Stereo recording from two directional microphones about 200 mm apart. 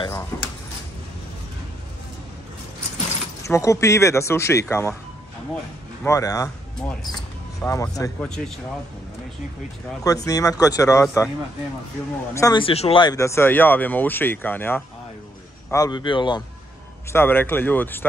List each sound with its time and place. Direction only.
0.3 s a sound: 15° left (ahead or behind)
3.4 s speech: 15° left (ahead or behind)
6.0 s speech: 15° left (ahead or behind)
7.6 s speech: 15° left (ahead or behind)
8.2 s speech: 5° left (ahead or behind)
10.0 s speech: 15° left (ahead or behind)
12.4 s a man's voice: 20° left (ahead or behind)
17.1 s speech: 10° left (ahead or behind)